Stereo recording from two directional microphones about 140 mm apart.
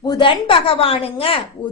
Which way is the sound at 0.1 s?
35° left (ahead or behind).